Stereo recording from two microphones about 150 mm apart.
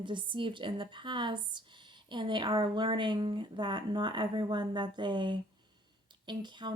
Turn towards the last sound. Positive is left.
turn(degrees=-30)  # may be behind; listen again after turning